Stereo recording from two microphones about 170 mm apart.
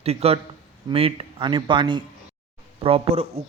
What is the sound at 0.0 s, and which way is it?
A man's voice, 35° right (ahead or behind).